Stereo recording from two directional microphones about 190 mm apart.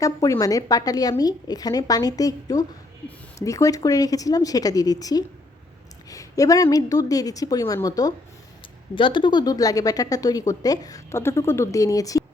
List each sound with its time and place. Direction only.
0.0 s a woman's voice: 15° left (ahead or behind)